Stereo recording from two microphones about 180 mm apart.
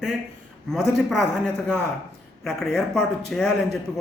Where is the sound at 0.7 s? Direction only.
Centre (ahead or behind).